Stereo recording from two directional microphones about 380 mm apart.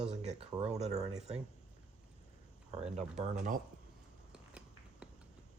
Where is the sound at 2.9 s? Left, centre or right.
Centre.